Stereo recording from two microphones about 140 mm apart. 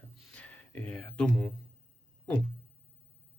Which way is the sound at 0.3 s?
10° left (ahead or behind).